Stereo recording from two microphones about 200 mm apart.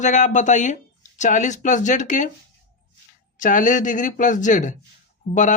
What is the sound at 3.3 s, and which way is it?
Speech, 40° left (ahead or behind).